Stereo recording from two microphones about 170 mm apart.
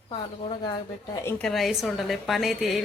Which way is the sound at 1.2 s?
15° left (ahead or behind).